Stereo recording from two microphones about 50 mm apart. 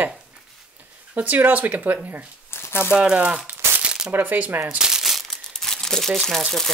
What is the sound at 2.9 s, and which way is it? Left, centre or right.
Speech, right.